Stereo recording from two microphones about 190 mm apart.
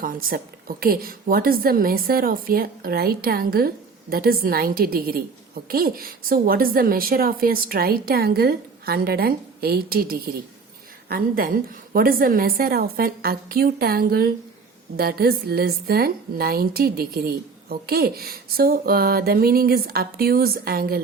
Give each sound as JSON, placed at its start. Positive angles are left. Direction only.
{"t": 0.0, "sound": "a woman's voice", "side_deg": -50}